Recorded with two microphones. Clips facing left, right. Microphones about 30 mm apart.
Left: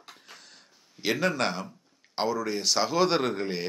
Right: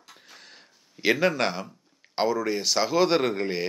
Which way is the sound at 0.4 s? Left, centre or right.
Centre.